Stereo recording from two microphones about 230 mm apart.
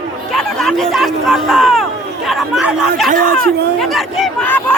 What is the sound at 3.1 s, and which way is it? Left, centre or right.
Speech, right.